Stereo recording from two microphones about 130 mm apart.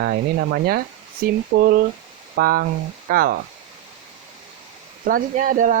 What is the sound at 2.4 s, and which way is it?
Speech, 90° right.